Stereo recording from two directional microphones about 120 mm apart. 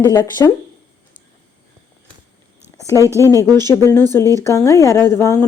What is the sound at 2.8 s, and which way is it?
A woman's voice, 25° left (ahead or behind).